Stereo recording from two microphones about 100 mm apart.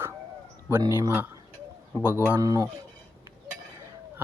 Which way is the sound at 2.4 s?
35° right (ahead or behind).